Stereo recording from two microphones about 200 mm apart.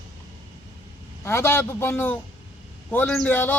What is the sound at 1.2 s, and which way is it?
Speech, 15° left (ahead or behind).